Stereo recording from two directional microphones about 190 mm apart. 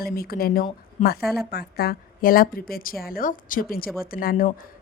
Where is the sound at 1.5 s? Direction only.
55° left (ahead or behind).